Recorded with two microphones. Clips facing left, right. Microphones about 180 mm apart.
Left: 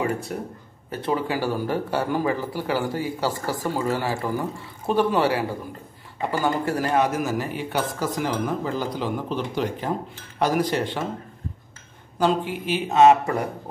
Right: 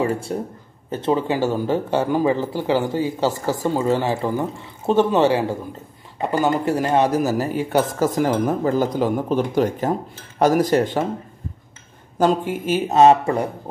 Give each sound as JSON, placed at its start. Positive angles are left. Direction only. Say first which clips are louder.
{"t": 0.3, "sound": "speech", "louder": "right 5 dB", "side_deg": -30}
{"t": 12.2, "sound": "speech", "louder": "right 4 dB", "side_deg": -45}